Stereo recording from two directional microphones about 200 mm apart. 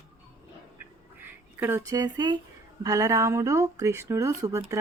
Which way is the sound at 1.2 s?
10° right (ahead or behind).